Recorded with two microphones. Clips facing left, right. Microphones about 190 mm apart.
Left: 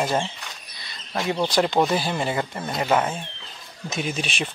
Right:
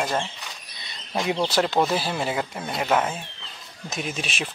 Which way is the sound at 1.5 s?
Centre (ahead or behind).